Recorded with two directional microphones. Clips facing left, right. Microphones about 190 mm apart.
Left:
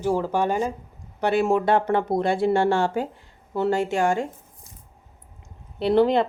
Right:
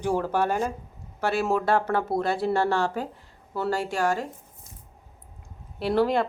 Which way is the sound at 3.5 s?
20° left (ahead or behind).